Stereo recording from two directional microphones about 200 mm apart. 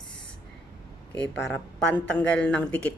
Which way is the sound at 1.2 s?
5° left (ahead or behind).